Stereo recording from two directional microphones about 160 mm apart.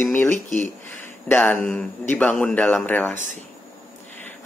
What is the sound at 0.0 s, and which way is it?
Speech, 10° left (ahead or behind).